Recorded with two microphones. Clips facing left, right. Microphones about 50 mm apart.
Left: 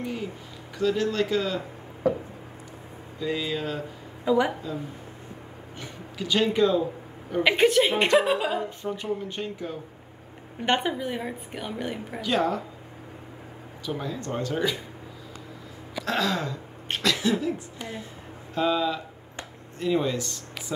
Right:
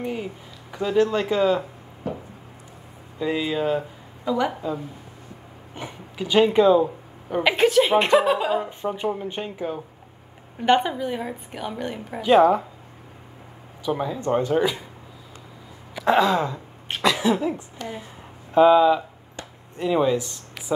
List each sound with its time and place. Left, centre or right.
0.0 s a sound: centre
0.7 s speech: centre
3.2 s speech: centre
4.2 s a woman's voice: centre
5.8 s speech: centre
7.4 s a woman's voice: centre
8.5 s speech: right
10.6 s a woman's voice: centre
12.2 s speech: right
13.8 s speech: centre
15.9 s a sound: right
17.0 s speech: centre
17.8 s speech: centre
18.5 s speech: right